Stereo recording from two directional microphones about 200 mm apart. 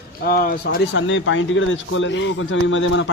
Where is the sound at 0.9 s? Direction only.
70° left (ahead or behind).